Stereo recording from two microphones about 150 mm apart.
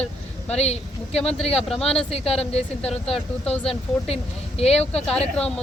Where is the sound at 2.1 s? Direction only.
40° left (ahead or behind).